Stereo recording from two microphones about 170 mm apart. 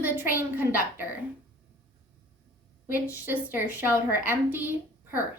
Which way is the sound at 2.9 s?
10° right (ahead or behind).